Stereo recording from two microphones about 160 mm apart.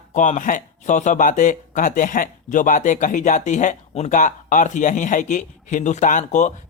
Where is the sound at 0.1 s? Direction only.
50° left (ahead or behind).